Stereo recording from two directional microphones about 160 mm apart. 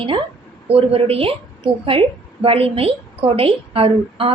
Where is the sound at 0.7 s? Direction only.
40° right (ahead or behind).